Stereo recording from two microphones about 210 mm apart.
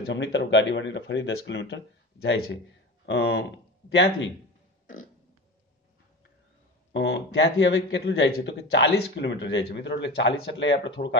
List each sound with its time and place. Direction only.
0.0 s speech: 60° left (ahead or behind)
3.1 s speech: 50° left (ahead or behind)
6.9 s speech: 60° left (ahead or behind)